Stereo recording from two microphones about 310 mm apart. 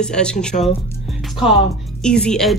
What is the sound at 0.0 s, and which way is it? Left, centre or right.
Speech, centre.